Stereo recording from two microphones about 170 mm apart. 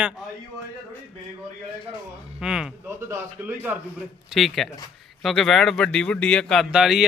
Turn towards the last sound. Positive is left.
turn(degrees=-5)  # may be behind; listen again after turning